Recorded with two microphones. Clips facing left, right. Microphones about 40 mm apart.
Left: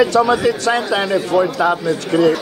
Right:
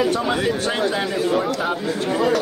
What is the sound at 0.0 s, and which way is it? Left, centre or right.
Speech, left.